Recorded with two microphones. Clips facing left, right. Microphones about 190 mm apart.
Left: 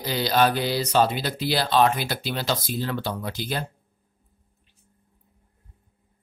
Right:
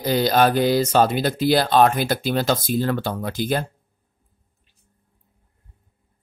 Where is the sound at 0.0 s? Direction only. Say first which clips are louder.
Right 4 dB; 50° right (ahead or behind).